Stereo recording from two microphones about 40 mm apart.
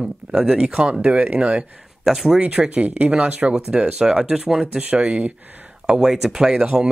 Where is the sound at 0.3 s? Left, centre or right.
Centre.